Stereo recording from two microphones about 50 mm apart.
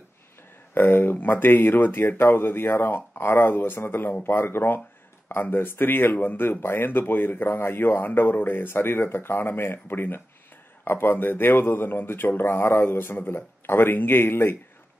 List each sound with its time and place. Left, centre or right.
0.7 s speech: left